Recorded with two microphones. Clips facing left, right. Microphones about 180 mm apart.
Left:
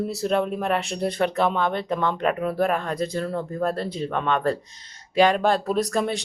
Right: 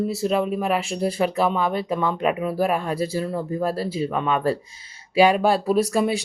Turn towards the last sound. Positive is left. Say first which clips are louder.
# right 3 dB
turn(degrees=-5)  # may be behind; listen again after turning